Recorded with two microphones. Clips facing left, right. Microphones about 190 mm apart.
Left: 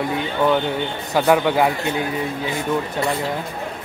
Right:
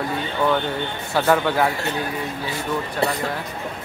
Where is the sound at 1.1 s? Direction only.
15° left (ahead or behind).